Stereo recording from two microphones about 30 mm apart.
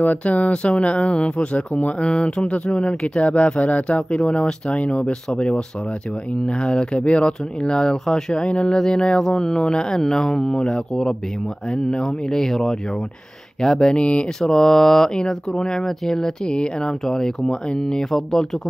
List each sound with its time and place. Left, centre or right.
0.0 s speech: left
0.5 s speech: left
2.0 s speech: left
2.4 s speech: left
4.2 s speech: left
6.4 s speech: left
7.6 s speech: left
8.7 s speech: left
13.9 s speech: left
14.4 s speech: left
16.4 s speech: left
17.0 s speech: centre